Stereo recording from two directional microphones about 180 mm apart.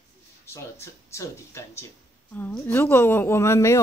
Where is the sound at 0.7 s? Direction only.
15° left (ahead or behind).